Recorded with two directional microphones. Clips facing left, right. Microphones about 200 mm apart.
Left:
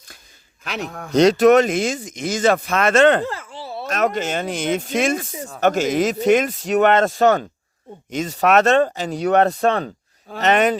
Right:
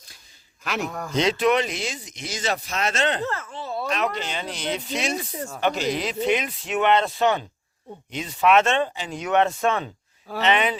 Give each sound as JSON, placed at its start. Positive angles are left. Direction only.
{"t": 0.6, "sound": "speech", "side_deg": 0}
{"t": 1.1, "sound": "speech", "side_deg": 40}
{"t": 3.2, "sound": "a sound", "side_deg": 10}
{"t": 3.8, "sound": "speech", "side_deg": 45}